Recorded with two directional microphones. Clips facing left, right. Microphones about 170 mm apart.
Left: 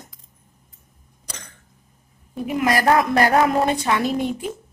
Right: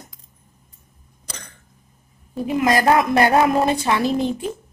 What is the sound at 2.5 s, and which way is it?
A woman's voice, 30° right (ahead or behind).